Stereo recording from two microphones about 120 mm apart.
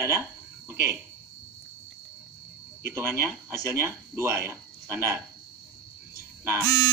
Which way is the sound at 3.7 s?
20° right (ahead or behind).